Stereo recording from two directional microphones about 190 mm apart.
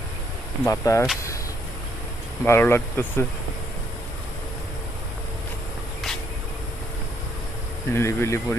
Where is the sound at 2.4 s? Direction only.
10° left (ahead or behind).